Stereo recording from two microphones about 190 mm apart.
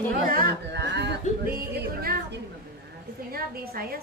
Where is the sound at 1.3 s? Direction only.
35° left (ahead or behind).